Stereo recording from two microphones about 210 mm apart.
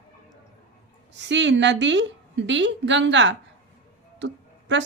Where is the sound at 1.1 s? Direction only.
55° right (ahead or behind).